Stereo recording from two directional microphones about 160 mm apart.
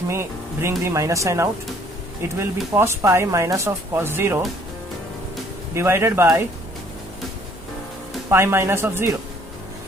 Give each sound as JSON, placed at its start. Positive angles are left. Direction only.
{"t": 0.1, "sound": "speech", "side_deg": -15}
{"t": 5.7, "sound": "speech", "side_deg": -15}
{"t": 8.3, "sound": "speech", "side_deg": -15}